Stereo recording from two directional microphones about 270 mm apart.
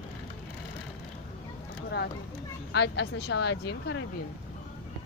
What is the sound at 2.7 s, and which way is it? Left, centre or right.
Speech, left.